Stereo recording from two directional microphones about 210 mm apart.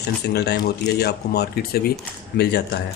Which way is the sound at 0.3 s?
50° left (ahead or behind).